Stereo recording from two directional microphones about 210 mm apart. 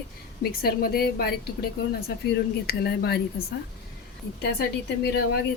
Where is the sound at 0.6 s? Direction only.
45° left (ahead or behind).